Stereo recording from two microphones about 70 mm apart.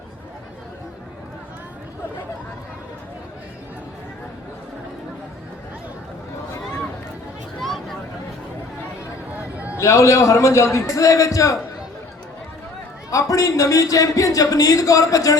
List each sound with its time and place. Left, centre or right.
7.6 s vehicle: centre
9.4 s a sound: right
9.7 s a man's voice: left
13.1 s speech: left